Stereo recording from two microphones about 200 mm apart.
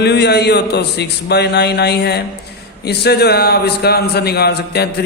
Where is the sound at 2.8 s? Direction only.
55° left (ahead or behind).